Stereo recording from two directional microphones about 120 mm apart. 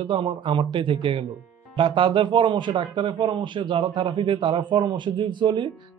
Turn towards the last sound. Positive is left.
turn(degrees=-40)  # may be behind; listen again after turning